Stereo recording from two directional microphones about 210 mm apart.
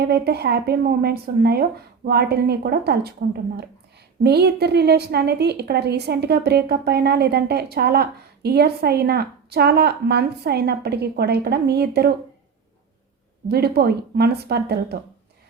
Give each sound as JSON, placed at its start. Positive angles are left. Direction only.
{"t": 0.0, "sound": "a woman's voice", "side_deg": -50}
{"t": 4.2, "sound": "a woman's voice", "side_deg": -50}
{"t": 13.5, "sound": "a woman's voice", "side_deg": -50}